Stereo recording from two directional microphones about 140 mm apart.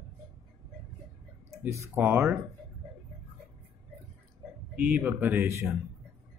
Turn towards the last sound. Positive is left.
turn(degrees=-15)  # may be behind; listen again after turning